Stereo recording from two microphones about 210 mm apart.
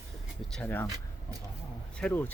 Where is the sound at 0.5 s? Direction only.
10° left (ahead or behind).